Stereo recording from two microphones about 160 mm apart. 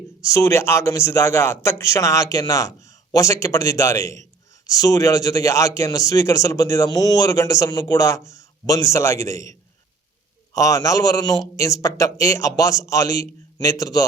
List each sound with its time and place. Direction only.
0.2 s speech: 20° left (ahead or behind)